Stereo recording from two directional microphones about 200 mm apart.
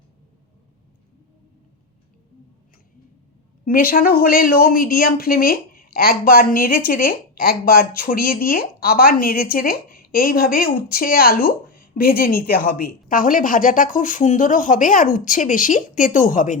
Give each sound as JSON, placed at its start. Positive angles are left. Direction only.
{"t": 3.7, "sound": "a woman's voice", "side_deg": 45}